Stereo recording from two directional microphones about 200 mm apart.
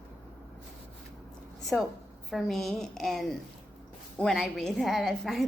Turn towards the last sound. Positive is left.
turn(degrees=0)  # may be behind; listen again after turning